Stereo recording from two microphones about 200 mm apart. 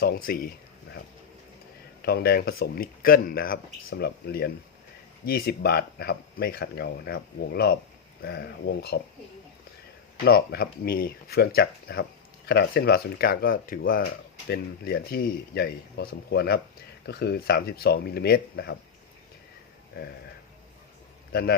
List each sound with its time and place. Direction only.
0.0 s speech: 45° left (ahead or behind)
2.0 s speech: 50° left (ahead or behind)
10.2 s speech: 50° left (ahead or behind)